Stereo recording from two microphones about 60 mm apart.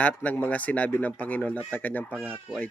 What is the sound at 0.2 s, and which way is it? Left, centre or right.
A man's voice, left.